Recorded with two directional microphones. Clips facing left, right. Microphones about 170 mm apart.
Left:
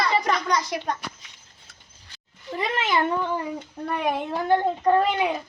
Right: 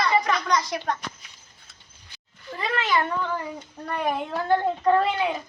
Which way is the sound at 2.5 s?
20° left (ahead or behind).